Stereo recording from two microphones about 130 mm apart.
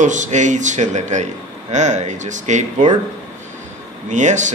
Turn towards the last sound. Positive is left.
turn(degrees=-65)  # may be behind; listen again after turning